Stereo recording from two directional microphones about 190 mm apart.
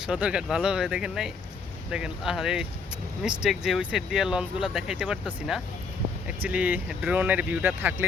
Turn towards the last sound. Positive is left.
turn(degrees=-10)  # may be behind; listen again after turning